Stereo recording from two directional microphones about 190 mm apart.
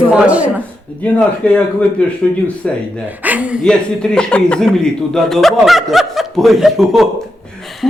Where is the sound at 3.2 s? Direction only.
10° right (ahead or behind).